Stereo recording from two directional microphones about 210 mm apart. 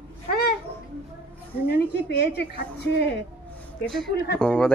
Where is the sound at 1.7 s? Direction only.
50° left (ahead or behind).